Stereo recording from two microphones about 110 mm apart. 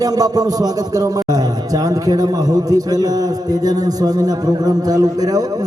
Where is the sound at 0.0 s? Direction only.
35° right (ahead or behind).